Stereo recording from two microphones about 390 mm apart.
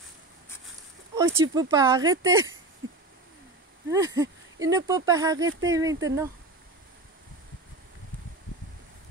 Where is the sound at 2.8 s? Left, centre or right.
Right.